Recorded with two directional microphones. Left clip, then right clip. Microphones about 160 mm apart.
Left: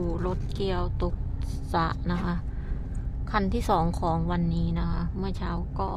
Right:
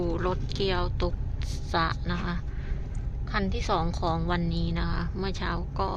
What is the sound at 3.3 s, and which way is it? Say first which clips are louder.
Speech: left 3 dB; 45° left (ahead or behind).